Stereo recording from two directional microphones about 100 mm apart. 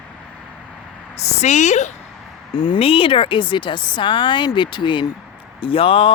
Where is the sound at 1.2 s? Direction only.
90° left.